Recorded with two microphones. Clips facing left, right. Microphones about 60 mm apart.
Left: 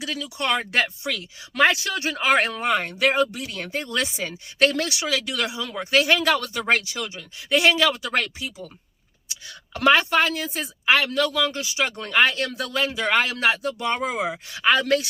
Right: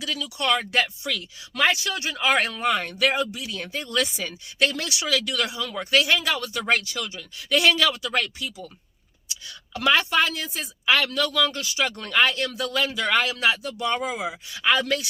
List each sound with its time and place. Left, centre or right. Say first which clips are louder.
0.0 s speech: even; left
3.2 s speech: left 4 dB; left
5.9 s speech: left 3 dB; left